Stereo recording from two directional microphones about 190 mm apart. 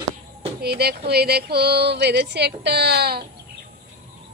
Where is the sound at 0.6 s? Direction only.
60° right (ahead or behind).